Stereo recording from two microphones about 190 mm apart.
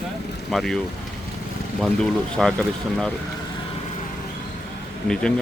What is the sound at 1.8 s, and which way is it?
Speech, 5° left (ahead or behind).